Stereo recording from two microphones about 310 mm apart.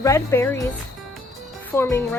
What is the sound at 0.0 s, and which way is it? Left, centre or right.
Cricket, centre.